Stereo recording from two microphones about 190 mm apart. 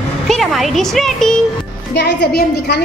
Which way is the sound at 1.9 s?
60° left (ahead or behind).